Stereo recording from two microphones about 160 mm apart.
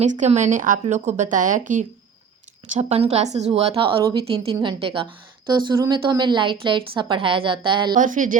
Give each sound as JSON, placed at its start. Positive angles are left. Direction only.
{"t": 0.0, "sound": "speech", "side_deg": -45}
{"t": 2.7, "sound": "a woman's voice", "side_deg": -40}
{"t": 7.9, "sound": "speech", "side_deg": -55}